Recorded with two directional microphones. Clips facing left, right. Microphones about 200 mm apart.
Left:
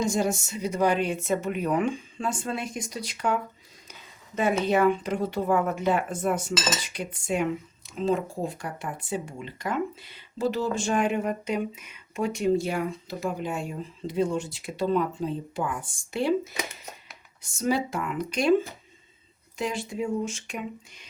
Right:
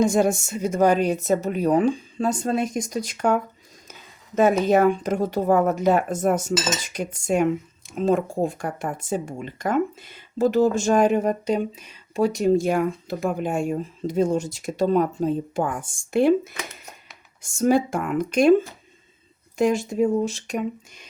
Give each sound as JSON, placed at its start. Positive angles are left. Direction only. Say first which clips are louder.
{"t": 0.0, "sound": "a woman's voice", "louder": "right 6 dB", "side_deg": -55}
{"t": 19.5, "sound": "speech", "louder": "right 9 dB", "side_deg": -45}